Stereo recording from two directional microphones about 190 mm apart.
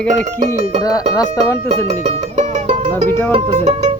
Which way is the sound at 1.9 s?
35° right (ahead or behind).